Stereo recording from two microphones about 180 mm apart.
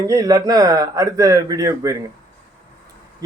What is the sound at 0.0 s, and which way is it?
Speech, 20° right (ahead or behind).